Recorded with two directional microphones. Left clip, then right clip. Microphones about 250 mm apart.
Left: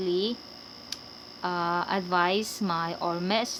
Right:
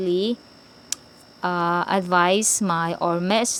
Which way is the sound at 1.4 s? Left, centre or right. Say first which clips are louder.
Right 6 dB; right.